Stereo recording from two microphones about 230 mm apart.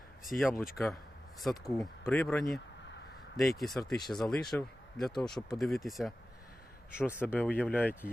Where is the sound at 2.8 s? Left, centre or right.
Left.